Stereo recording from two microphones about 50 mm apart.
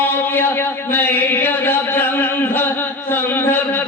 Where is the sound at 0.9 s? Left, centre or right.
Left.